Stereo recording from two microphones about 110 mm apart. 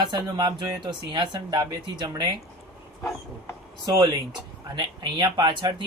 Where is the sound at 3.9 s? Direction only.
40° right (ahead or behind).